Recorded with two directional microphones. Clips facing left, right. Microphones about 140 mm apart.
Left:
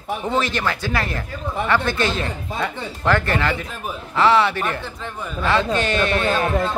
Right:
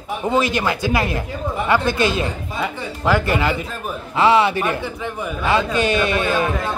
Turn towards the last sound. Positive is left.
turn(degrees=-15)  # may be behind; listen again after turning